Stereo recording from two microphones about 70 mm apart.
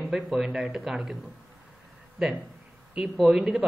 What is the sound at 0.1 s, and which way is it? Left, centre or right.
Speech, centre.